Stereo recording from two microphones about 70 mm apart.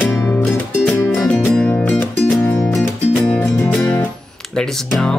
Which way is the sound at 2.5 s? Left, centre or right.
Centre.